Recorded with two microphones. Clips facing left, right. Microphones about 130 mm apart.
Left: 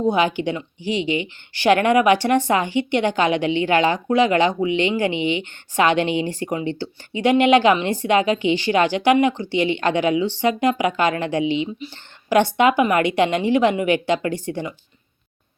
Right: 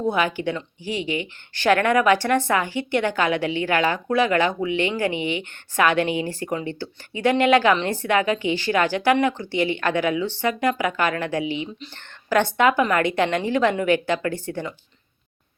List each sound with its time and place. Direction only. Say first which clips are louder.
0.0 s a woman's voice: left 3 dB; 20° left (ahead or behind)